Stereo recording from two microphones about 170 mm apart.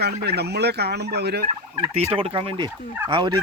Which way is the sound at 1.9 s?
35° right (ahead or behind).